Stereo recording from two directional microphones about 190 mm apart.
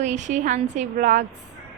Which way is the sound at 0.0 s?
40° right (ahead or behind).